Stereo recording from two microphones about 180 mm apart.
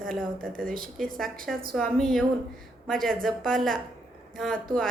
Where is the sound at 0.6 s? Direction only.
50° right (ahead or behind).